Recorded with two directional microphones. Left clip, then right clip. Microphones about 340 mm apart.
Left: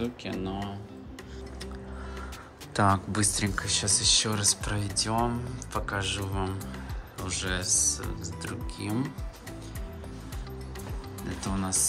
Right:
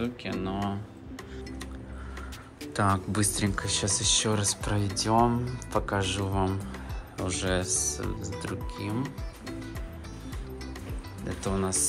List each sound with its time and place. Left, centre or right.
0.0 s speech: centre
2.7 s speech: centre
11.2 s speech: centre